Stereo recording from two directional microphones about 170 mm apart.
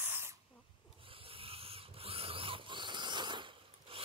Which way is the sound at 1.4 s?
35° right (ahead or behind).